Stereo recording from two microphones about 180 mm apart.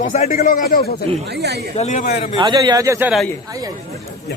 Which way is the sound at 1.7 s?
40° left (ahead or behind).